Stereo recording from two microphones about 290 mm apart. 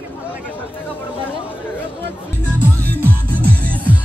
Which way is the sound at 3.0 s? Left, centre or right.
Centre.